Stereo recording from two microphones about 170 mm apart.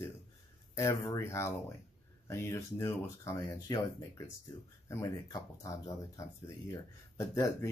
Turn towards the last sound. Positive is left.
turn(degrees=20)  # may be behind; listen again after turning